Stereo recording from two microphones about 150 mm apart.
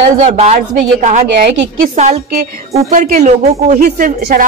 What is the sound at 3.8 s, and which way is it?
Speech, 65° right (ahead or behind).